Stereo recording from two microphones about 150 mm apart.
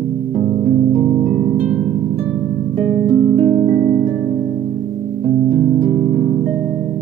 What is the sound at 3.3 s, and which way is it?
Music, 15° left (ahead or behind).